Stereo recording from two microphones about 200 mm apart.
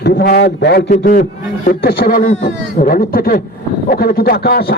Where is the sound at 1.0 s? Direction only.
45° left (ahead or behind).